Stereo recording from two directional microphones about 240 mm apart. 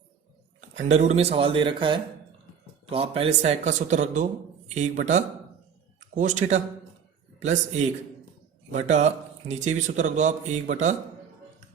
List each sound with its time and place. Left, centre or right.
0.7 s a man's voice: right